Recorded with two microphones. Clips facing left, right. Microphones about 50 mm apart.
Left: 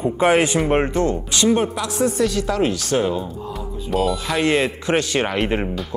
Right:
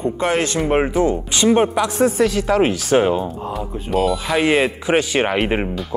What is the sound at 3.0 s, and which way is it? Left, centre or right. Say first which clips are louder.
Speech: right 5 dB; right.